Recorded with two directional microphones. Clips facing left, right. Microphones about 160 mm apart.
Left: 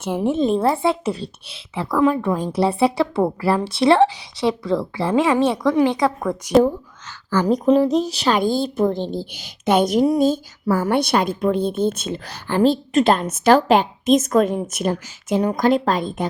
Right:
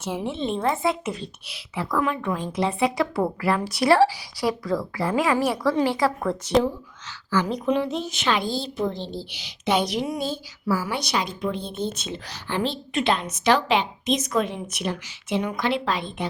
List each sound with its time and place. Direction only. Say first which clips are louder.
0.0 s speech: left 8 dB; 50° left (ahead or behind); by 6.5 s 15° left (ahead or behind)
7.3 s a woman's voice: left 7 dB; 45° left (ahead or behind)